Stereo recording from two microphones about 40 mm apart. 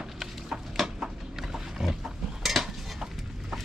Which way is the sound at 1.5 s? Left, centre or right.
Centre.